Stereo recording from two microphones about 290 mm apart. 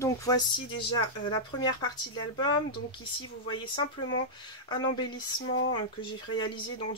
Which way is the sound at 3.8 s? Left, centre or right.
Centre.